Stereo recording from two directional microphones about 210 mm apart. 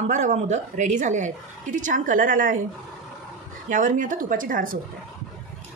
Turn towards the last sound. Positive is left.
turn(degrees=-40)  # may be behind; listen again after turning